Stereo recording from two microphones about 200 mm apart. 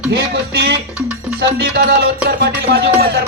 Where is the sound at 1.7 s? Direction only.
50° right (ahead or behind).